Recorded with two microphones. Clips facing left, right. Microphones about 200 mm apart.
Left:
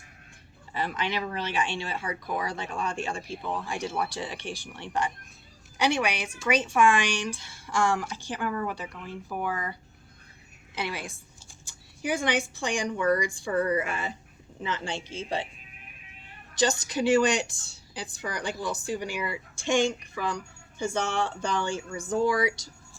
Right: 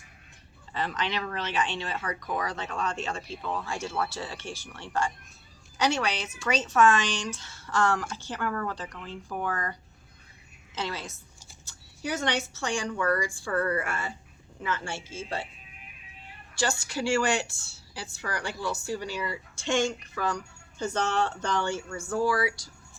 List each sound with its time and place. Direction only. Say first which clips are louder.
0.7 s a woman's voice: left 1 dB; 10° left (ahead or behind)
10.8 s a woman's voice: left 1 dB; 15° left (ahead or behind)
16.6 s a woman's voice: left 4 dB; 20° left (ahead or behind)